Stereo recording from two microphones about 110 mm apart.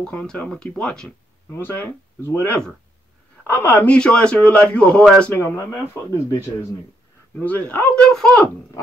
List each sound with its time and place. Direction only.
0.0 s a man's voice: 10° left (ahead or behind)
1.5 s a man's voice: 20° left (ahead or behind)
5.3 s a man's voice: 20° left (ahead or behind)